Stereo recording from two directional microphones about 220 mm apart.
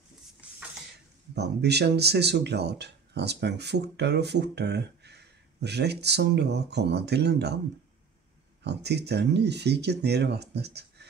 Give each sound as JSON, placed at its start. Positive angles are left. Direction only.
{"t": 1.3, "sound": "speech", "side_deg": -50}
{"t": 8.6, "sound": "speech", "side_deg": -50}